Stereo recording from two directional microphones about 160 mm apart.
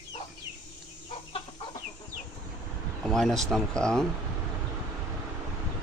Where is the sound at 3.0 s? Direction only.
5° left (ahead or behind).